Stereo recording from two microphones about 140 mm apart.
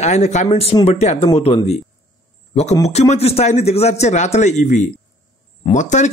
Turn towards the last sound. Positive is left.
turn(degrees=60)  # may be behind; listen again after turning